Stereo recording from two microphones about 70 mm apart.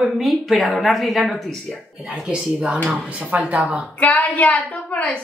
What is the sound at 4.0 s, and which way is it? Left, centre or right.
A woman's voice, left.